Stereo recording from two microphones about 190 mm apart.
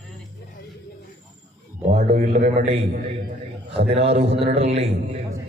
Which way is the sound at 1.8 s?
40° right (ahead or behind).